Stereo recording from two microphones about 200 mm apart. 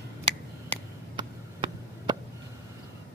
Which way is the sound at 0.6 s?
25° right (ahead or behind).